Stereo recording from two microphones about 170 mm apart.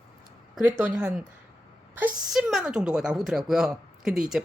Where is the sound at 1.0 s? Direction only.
5° right (ahead or behind).